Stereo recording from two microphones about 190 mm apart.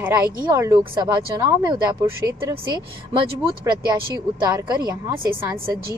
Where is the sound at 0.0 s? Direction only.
10° right (ahead or behind).